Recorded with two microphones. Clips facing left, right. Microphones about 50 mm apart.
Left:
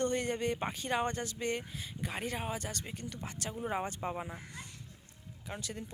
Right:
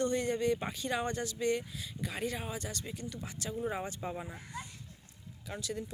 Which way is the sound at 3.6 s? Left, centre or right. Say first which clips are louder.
Left 1 dB; left.